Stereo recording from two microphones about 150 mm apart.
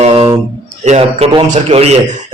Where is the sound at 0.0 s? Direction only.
40° right (ahead or behind).